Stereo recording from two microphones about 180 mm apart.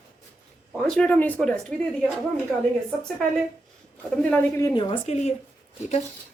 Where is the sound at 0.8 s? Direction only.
5° left (ahead or behind).